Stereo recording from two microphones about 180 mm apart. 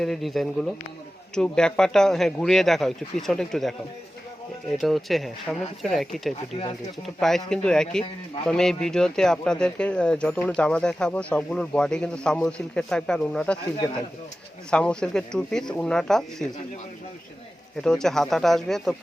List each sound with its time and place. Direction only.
0.0 s speech: centre (ahead or behind)
4.8 s speech: centre (ahead or behind)
6.5 s speech: 30° left (ahead or behind)
7.2 s speech: centre (ahead or behind)
14.7 s speech: 5° left (ahead or behind)
17.8 s speech: 5° left (ahead or behind)